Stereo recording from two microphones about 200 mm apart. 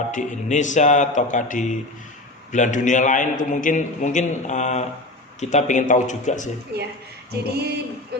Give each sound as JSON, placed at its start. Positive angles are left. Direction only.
{"t": 0.1, "sound": "a man's voice", "side_deg": 40}
{"t": 7.3, "sound": "music", "side_deg": -55}